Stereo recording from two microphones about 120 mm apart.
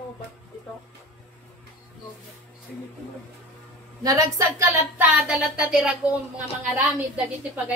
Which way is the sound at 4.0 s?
25° right (ahead or behind).